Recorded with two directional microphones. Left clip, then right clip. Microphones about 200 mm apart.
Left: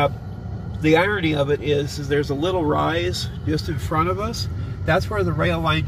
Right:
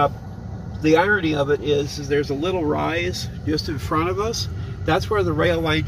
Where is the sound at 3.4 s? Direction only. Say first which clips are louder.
Right 2 dB; 35° right (ahead or behind).